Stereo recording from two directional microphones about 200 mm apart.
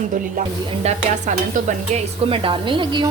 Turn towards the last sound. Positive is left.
turn(degrees=-25)  # may be behind; listen again after turning